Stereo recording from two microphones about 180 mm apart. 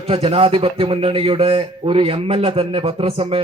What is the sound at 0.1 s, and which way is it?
Speech, 35° right (ahead or behind).